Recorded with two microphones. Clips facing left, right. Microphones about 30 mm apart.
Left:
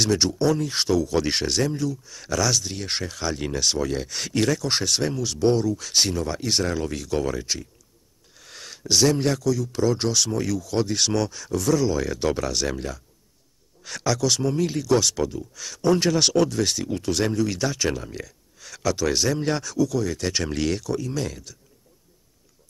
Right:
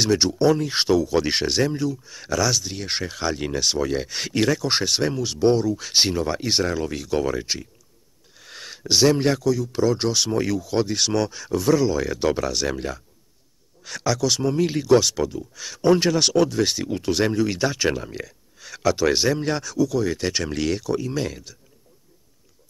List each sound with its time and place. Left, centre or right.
0.0 s speech: centre
5.9 s speech: right
14.7 s speech: centre
16.1 s speech: centre
19.4 s speech: centre
20.0 s speech: centre
20.3 s speech: centre